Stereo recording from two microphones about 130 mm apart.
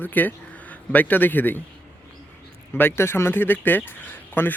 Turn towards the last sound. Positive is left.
turn(degrees=15)  # may be behind; listen again after turning